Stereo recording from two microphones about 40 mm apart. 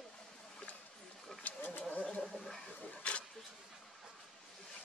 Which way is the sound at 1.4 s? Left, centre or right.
Left.